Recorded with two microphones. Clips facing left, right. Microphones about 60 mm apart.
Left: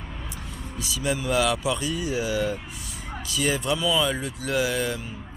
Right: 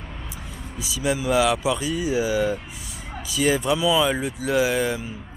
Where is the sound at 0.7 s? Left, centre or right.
Centre.